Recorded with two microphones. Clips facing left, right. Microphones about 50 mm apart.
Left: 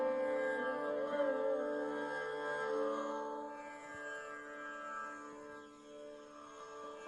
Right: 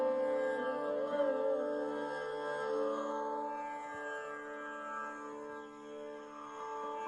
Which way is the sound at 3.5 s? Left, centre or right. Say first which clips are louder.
Right 7 dB; right.